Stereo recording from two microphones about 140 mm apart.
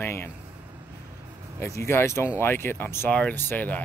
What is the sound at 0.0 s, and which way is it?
Speech, 15° left (ahead or behind).